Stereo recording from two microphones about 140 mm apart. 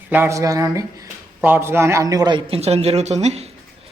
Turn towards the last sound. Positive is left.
turn(degrees=-50)  # may be behind; listen again after turning